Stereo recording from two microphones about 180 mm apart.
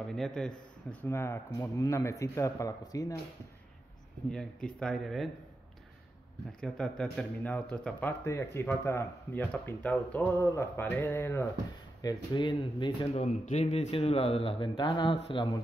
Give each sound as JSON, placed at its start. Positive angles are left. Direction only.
{"t": 0.1, "sound": "speech", "side_deg": 5}
{"t": 1.0, "sound": "speech", "side_deg": 15}
{"t": 4.3, "sound": "speech", "side_deg": 5}
{"t": 6.6, "sound": "speech", "side_deg": 5}
{"t": 13.1, "sound": "speech", "side_deg": 40}